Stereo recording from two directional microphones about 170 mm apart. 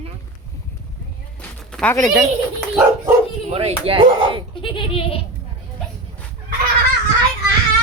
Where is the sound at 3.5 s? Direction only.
35° right (ahead or behind).